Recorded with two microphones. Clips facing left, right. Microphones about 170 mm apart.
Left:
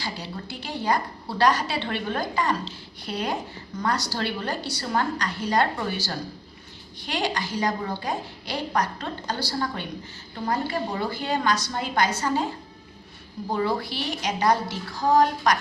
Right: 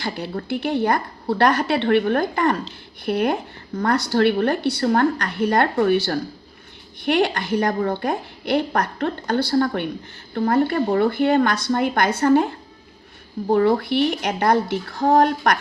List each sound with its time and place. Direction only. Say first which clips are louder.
0.0 s a woman's voice: right 7 dB; 55° right (ahead or behind)
13.5 s a woman's voice: right 9 dB; 55° right (ahead or behind)